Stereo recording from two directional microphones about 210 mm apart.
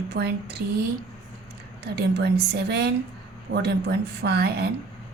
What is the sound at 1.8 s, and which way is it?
A woman's voice, 50° right (ahead or behind).